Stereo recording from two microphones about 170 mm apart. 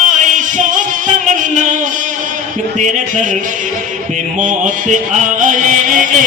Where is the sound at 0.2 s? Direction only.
50° right (ahead or behind).